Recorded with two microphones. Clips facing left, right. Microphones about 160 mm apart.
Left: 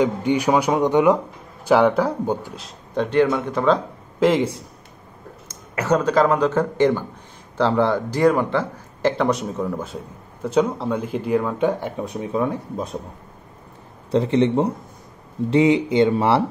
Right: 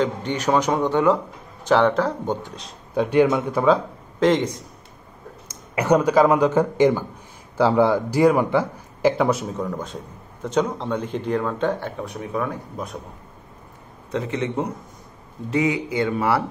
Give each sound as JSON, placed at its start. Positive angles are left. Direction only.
{"t": 0.0, "sound": "speech", "side_deg": 10}
{"t": 2.9, "sound": "a man's voice", "side_deg": -10}
{"t": 4.2, "sound": "a man's voice", "side_deg": 5}
{"t": 5.8, "sound": "a man's voice", "side_deg": -15}
{"t": 14.1, "sound": "a man's voice", "side_deg": 30}